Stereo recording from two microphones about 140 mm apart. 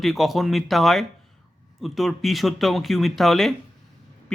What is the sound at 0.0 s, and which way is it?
A man's voice, centre (ahead or behind).